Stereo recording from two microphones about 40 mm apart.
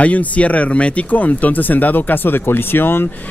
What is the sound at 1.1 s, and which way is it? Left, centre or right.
Speech, left.